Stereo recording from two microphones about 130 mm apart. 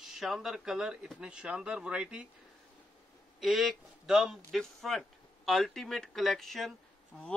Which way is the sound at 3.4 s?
Centre (ahead or behind).